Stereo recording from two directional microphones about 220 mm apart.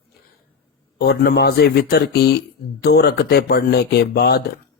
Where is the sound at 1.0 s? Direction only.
50° left (ahead or behind).